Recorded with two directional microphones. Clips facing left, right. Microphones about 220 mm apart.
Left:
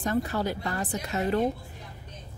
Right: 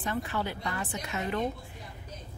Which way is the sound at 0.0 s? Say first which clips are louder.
Left 5 dB; 40° left (ahead or behind).